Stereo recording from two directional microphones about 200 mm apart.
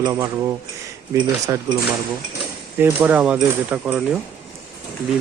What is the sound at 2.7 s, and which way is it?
Speech, 10° right (ahead or behind).